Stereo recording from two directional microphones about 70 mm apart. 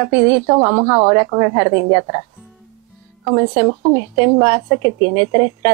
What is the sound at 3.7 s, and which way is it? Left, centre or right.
Speech, right.